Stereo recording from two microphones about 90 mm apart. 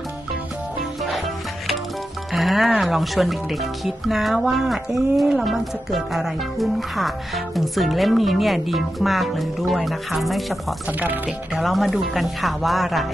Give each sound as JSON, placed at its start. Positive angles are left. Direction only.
{"t": 2.3, "sound": "speech", "side_deg": 0}
{"t": 10.9, "sound": "speech", "side_deg": -20}
{"t": 11.5, "sound": "speech", "side_deg": 0}